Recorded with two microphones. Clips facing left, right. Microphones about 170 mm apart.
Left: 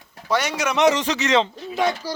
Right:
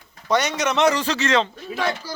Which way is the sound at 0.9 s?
20° left (ahead or behind).